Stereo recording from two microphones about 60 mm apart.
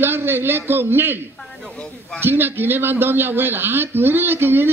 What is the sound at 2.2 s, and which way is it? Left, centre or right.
A man's voice, right.